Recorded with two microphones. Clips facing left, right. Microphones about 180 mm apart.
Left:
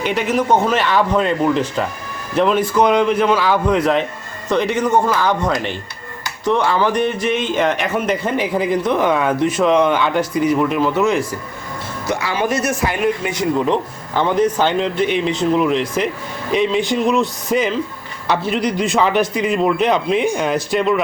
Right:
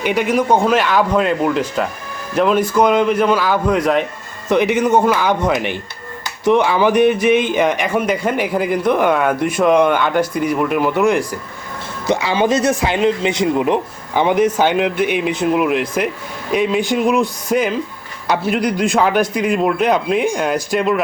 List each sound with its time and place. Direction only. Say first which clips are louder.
0.0 s speech: right 2 dB; centre (ahead or behind)
4.4 s speech: right 3 dB; 15° right (ahead or behind)
7.8 s speech: right 1 dB; centre (ahead or behind)